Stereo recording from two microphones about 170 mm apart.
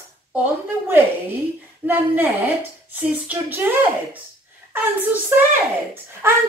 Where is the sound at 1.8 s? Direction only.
10° right (ahead or behind).